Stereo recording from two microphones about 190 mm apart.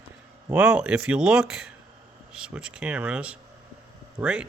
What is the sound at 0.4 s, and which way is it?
Speech, 5° right (ahead or behind).